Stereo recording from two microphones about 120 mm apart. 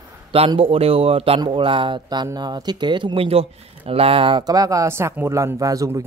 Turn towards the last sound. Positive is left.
turn(degrees=-25)  # may be behind; listen again after turning